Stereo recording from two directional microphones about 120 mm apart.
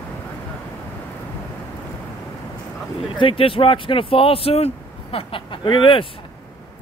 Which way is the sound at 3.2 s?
45° left (ahead or behind).